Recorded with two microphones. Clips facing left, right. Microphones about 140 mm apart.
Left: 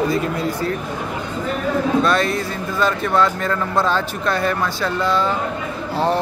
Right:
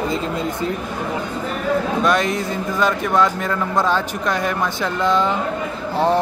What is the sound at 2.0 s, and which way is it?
Speech, 15° right (ahead or behind).